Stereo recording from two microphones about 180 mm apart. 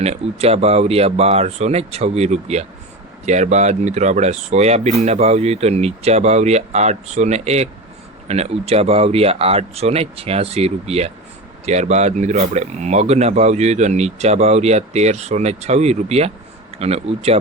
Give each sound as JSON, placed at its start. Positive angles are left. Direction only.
{"t": 0.0, "sound": "speech", "side_deg": -35}